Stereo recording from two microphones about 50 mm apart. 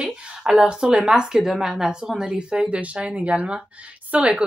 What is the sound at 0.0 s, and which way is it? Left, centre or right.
A woman's voice, centre.